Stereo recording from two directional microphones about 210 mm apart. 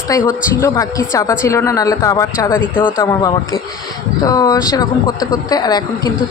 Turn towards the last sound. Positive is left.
turn(degrees=20)  # may be behind; listen again after turning